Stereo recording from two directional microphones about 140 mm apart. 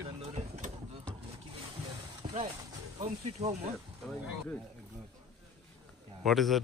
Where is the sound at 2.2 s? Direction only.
35° right (ahead or behind).